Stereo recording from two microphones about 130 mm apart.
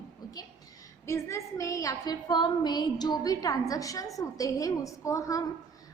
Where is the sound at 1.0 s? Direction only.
20° left (ahead or behind).